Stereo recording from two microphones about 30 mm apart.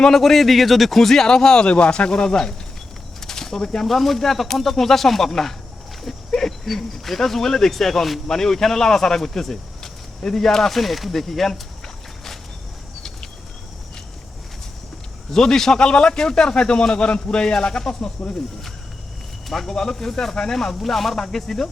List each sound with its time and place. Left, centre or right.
0.1 s speech: centre
1.3 s speech: left
1.6 s a man's voice: left
2.1 s speech: centre
3.2 s a sound: centre
3.8 s speech: centre
10.8 s speech: centre
15.3 s speech: centre
15.7 s a man's voice: left
16.1 s a man's voice: left
19.6 s speech: centre